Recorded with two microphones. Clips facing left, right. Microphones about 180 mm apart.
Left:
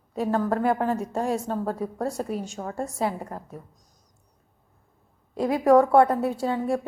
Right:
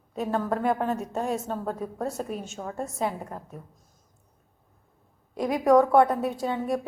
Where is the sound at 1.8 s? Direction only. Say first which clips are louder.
Left 3 dB; 15° left (ahead or behind).